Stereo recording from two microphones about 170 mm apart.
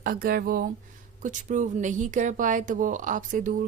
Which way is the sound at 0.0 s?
60° right (ahead or behind).